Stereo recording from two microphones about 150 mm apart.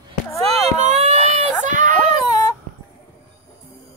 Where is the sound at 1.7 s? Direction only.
60° right (ahead or behind).